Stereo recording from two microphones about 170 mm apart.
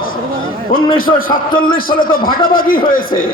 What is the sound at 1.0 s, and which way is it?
Speech, 55° left (ahead or behind).